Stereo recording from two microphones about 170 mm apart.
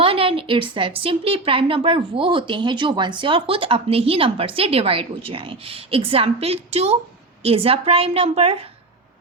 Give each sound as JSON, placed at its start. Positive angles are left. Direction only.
{"t": 0.0, "sound": "a woman's voice", "side_deg": -30}